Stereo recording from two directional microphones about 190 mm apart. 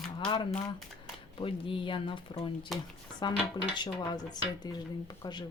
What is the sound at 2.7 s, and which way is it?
Speech, centre (ahead or behind).